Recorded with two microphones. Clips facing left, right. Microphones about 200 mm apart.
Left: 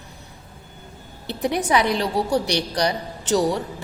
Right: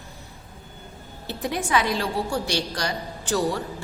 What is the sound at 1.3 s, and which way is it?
A woman's voice, 20° left (ahead or behind).